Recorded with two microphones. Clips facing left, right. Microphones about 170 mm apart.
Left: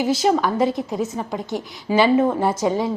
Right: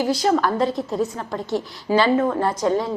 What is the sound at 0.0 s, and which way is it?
A woman's voice, 20° left (ahead or behind).